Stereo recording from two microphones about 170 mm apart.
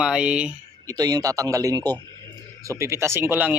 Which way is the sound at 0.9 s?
20° right (ahead or behind).